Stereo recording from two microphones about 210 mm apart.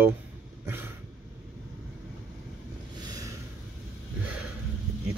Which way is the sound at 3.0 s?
15° right (ahead or behind).